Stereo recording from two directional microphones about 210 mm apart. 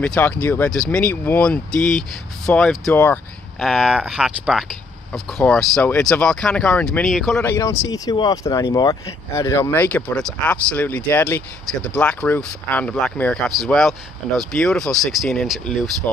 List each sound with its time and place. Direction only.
0.0 s speech: 5° left (ahead or behind)
7.4 s speech: 15° left (ahead or behind)